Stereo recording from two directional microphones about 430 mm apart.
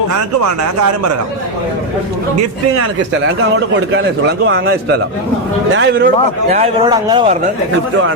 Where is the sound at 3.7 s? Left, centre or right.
Right.